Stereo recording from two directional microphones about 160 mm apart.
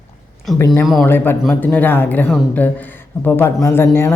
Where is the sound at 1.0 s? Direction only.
15° left (ahead or behind).